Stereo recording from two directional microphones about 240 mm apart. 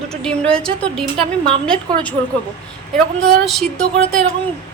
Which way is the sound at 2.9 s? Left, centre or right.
Centre.